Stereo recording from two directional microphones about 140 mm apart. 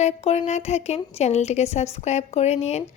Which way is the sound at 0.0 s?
50° left (ahead or behind).